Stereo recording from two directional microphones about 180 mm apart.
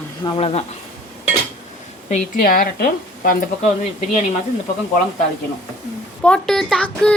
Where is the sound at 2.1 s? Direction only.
45° left (ahead or behind).